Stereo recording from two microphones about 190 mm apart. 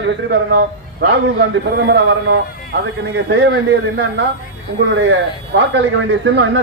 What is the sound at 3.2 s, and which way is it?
A man's voice, 65° right (ahead or behind).